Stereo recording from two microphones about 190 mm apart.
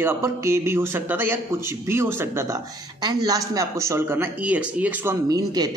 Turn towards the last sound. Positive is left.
turn(degrees=-20)  # may be behind; listen again after turning